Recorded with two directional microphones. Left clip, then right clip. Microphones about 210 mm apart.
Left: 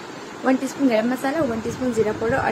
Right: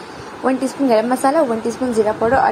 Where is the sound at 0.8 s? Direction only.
15° right (ahead or behind).